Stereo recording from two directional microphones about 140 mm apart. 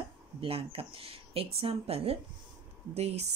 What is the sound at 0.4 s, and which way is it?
Speech, 45° right (ahead or behind).